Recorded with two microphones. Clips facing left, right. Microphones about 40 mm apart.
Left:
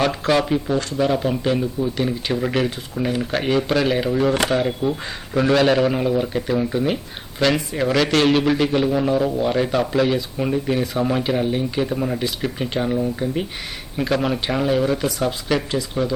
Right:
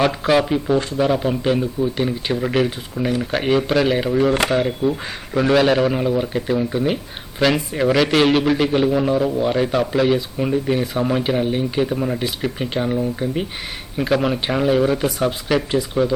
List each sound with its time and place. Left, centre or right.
0.0 s speech: centre
0.8 s speech: centre
1.0 s speech: centre